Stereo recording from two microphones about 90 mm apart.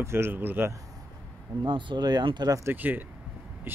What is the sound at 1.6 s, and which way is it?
Speech, 60° right (ahead or behind).